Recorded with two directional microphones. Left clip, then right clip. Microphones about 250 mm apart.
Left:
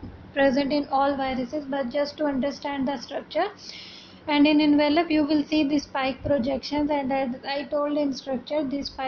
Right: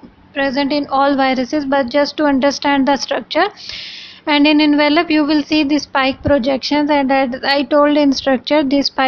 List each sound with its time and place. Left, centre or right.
0.4 s a woman's voice: centre